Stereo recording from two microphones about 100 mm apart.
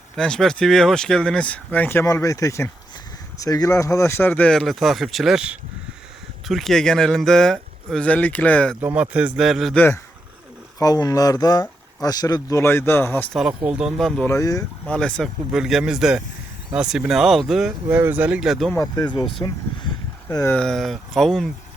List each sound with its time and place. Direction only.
0.2 s speech: 5° left (ahead or behind)
2.0 s speech: 30° left (ahead or behind); by 4.5 s 15° left (ahead or behind)
4.5 s speech: centre (ahead or behind)
8.8 s a man's voice: 15° right (ahead or behind)
9.7 s speech: 20° left (ahead or behind)
10.8 s speech: 35° left (ahead or behind)
13.7 s a man's voice: 10° right (ahead or behind)
14.3 s speech: 30° left (ahead or behind)
14.8 s speech: 10° left (ahead or behind)
15.5 s speech: 5° right (ahead or behind)
17.8 s a man's voice: 20° right (ahead or behind)
18.3 s speech: centre (ahead or behind)
18.8 s speech: 45° left (ahead or behind)
20.6 s speech: centre (ahead or behind)